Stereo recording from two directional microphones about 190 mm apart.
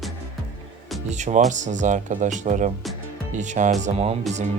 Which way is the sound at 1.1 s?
40° right (ahead or behind).